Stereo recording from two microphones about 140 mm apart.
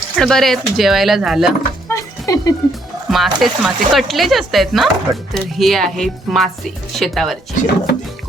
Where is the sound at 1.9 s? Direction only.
25° left (ahead or behind).